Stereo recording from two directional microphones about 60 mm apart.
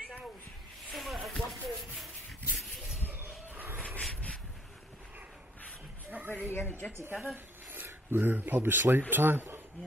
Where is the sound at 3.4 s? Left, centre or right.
Right.